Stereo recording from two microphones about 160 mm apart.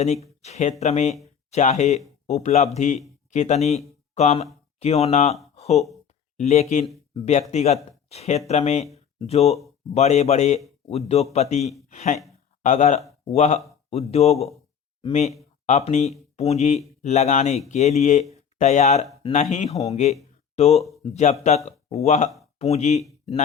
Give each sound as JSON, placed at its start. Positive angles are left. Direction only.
{"t": 0.4, "sound": "speech", "side_deg": 45}
{"t": 5.5, "sound": "a sound", "side_deg": 40}
{"t": 6.3, "sound": "a man's voice", "side_deg": 45}